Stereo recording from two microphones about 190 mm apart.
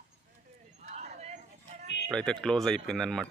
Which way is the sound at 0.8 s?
35° right (ahead or behind).